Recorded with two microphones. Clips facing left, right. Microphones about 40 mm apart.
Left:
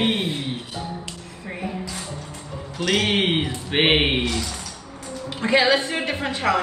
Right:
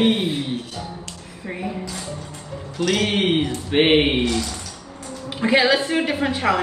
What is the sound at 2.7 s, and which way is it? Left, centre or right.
Speech, centre.